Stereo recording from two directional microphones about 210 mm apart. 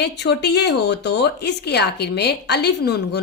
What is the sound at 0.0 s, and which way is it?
Speech, 55° left (ahead or behind).